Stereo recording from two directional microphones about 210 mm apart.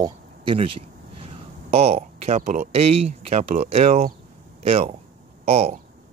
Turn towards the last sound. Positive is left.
turn(degrees=-30)  # may be behind; listen again after turning